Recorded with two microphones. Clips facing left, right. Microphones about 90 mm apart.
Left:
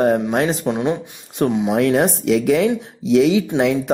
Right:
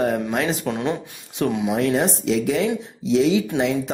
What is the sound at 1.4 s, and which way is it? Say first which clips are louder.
Speech: left 4 dB; 35° left (ahead or behind).